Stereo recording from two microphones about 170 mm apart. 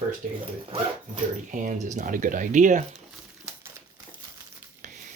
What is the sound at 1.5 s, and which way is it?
Speech, 45° right (ahead or behind).